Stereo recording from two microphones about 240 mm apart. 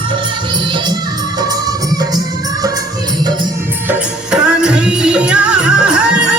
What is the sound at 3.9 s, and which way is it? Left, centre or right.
Music, centre.